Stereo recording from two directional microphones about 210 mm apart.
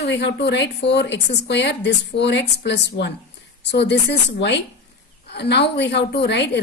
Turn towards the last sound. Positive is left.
turn(degrees=55)  # may be behind; listen again after turning